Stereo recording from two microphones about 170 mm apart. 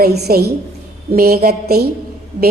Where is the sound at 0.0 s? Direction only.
70° right (ahead or behind).